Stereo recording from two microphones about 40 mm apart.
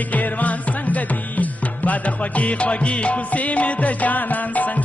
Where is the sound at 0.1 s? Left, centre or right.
Left.